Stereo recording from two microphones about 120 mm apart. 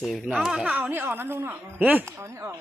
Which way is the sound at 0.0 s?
Centre (ahead or behind).